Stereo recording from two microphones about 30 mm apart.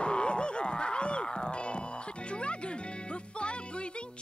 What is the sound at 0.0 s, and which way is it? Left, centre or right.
Music, left.